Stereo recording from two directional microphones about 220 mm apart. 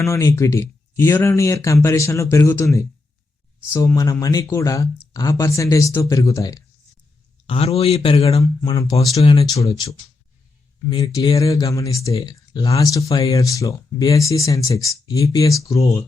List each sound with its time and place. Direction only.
0.0 s speech: 15° left (ahead or behind)
7.4 s speech: 25° left (ahead or behind)